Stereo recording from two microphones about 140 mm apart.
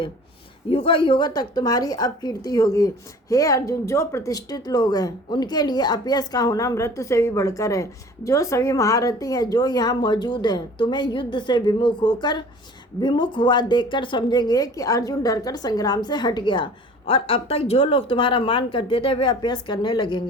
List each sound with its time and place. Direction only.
0.7 s a woman's voice: 40° left (ahead or behind)